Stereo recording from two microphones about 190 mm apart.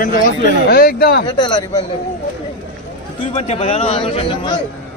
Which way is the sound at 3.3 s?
35° left (ahead or behind).